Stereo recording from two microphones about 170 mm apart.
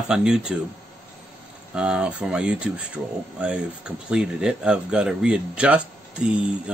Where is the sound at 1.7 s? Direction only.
5° right (ahead or behind).